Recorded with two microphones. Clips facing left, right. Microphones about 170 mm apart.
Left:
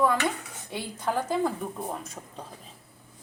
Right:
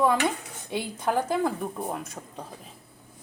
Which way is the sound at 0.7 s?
15° right (ahead or behind).